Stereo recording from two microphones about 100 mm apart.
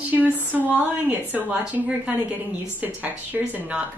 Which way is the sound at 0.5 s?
15° right (ahead or behind).